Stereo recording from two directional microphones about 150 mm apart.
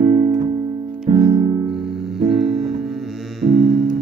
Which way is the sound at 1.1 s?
35° right (ahead or behind).